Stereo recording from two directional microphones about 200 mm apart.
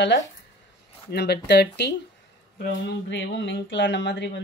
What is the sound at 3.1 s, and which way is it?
Speech, 65° left (ahead or behind).